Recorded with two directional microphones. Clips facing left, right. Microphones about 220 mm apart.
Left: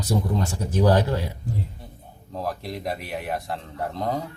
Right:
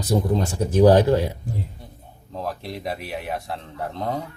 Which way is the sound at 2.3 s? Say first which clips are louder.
Even; centre (ahead or behind).